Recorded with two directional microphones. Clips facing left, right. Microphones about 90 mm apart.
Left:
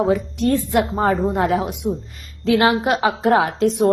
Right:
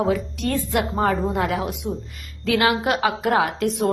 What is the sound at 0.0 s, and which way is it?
A woman's voice, 30° left (ahead or behind).